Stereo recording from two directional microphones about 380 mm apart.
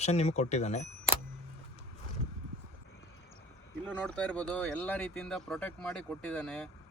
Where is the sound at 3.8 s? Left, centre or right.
Centre.